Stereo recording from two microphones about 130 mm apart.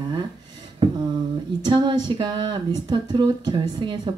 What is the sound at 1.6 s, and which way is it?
Speech, 35° right (ahead or behind).